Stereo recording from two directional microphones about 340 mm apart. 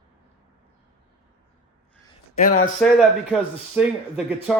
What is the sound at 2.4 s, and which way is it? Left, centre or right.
Speech, left.